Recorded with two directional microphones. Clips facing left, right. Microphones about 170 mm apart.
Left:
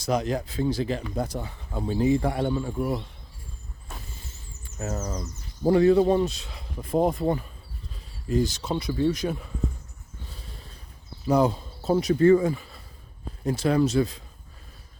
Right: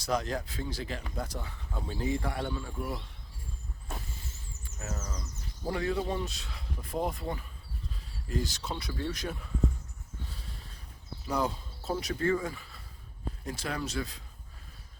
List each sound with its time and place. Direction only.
0.0 s speech: 20° left (ahead or behind)
4.8 s insect: 40° left (ahead or behind)
5.6 s speech: 30° left (ahead or behind)
6.2 s speech: 25° left (ahead or behind)
8.3 s speech: 20° left (ahead or behind)
11.3 s speech: 20° left (ahead or behind)